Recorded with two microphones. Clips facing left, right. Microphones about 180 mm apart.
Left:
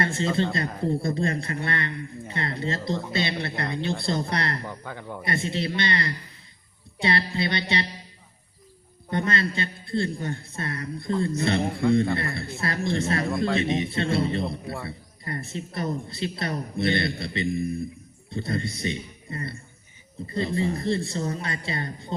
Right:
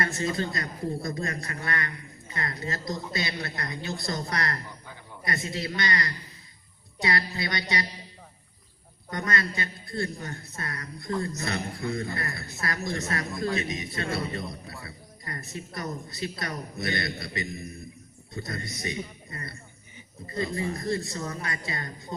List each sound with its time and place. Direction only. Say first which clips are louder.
0.0 s a woman's voice: left 4 dB; 30° left (ahead or behind)
4.6 s a man's voice: left 9 dB; 65° left (ahead or behind)
5.2 s a woman's voice: left 4 dB; 25° left (ahead or behind)
9.0 s a woman's voice: left 4 dB; 25° left (ahead or behind)
13.2 s a man's voice: left 5 dB; 65° left (ahead or behind)
13.5 s a woman's voice: left 6 dB; 30° left (ahead or behind)